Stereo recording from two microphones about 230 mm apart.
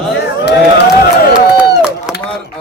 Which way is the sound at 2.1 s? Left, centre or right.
Centre.